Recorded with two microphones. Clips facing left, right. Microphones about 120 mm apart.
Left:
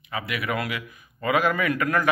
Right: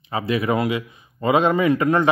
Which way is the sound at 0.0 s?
30° right (ahead or behind).